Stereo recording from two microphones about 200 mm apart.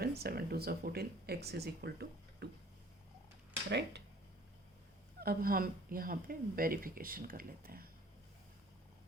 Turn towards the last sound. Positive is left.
turn(degrees=-45)  # may be behind; listen again after turning